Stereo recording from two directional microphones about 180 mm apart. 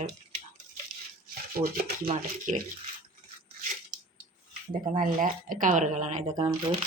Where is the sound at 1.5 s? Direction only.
55° right (ahead or behind).